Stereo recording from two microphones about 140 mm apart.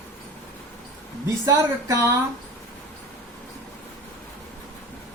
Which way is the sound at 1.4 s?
25° right (ahead or behind).